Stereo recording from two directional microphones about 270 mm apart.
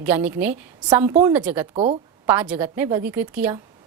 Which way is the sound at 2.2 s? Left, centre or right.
Centre.